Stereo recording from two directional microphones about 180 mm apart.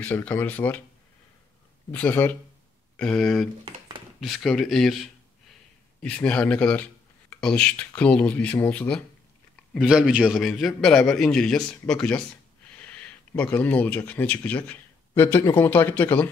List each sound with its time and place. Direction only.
0.0 s speech: 10° left (ahead or behind)
1.9 s a man's voice: 10° left (ahead or behind)
6.0 s a man's voice: 5° left (ahead or behind)